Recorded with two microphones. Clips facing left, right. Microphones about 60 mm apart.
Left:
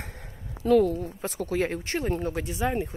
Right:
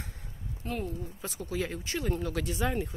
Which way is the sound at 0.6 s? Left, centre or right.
Left.